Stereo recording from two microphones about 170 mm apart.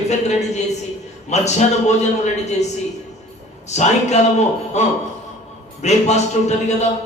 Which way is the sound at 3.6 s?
40° left (ahead or behind).